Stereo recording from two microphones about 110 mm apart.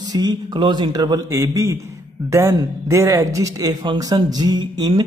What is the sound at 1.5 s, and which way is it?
Speech, 25° right (ahead or behind).